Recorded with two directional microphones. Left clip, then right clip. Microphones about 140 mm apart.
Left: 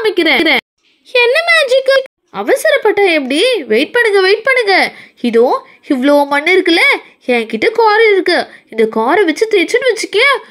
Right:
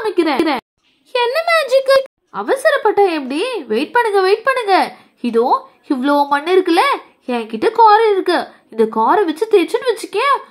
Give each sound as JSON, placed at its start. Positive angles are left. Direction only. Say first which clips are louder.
{"t": 0.0, "sound": "a woman's voice", "louder": "left 5 dB", "side_deg": 20}